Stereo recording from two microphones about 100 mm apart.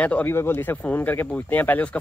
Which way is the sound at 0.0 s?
15° left (ahead or behind).